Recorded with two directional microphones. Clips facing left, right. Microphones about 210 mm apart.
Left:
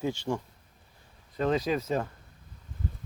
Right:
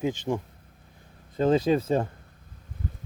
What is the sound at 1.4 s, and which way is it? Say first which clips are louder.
Speech: right 5 dB; 30° right (ahead or behind).